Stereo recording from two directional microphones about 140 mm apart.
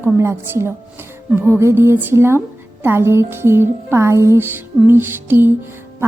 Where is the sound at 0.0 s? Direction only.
20° right (ahead or behind).